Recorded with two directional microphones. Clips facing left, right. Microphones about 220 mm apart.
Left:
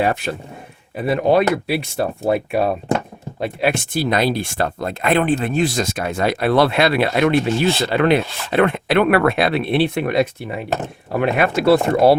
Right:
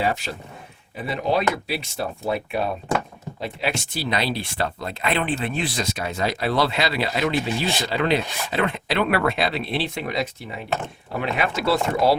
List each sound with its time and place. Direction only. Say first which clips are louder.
0.0 s speech: left 5 dB; 60° left (ahead or behind)
3.4 s speech: left 7 dB; 55° left (ahead or behind)